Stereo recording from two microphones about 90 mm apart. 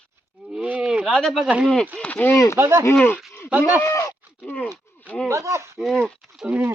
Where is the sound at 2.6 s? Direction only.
30° right (ahead or behind).